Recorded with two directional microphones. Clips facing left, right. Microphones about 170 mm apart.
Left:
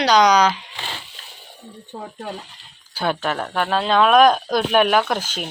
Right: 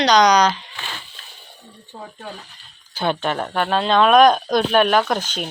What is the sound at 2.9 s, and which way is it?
Speech, 5° left (ahead or behind).